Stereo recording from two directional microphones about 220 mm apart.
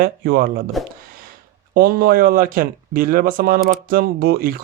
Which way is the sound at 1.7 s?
40° right (ahead or behind).